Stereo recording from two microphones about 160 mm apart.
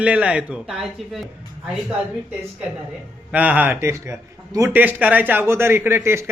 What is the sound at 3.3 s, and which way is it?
Speech, 10° right (ahead or behind).